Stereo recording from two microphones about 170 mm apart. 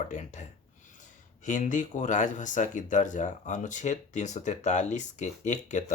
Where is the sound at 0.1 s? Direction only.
45° left (ahead or behind).